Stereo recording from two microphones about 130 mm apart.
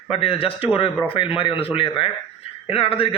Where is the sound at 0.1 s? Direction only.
45° left (ahead or behind).